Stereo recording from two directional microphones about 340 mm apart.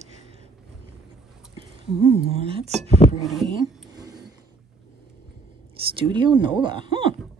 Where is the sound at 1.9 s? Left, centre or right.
Centre.